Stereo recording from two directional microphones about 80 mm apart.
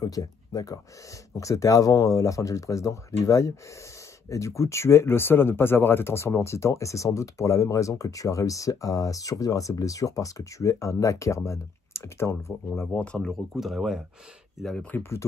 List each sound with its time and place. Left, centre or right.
0.0 s speech: left
13.0 s speech: centre
13.3 s speech: centre
14.9 s speech: left